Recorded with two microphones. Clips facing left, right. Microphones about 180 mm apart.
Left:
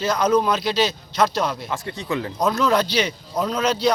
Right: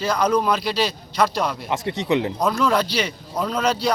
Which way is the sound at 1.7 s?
20° right (ahead or behind).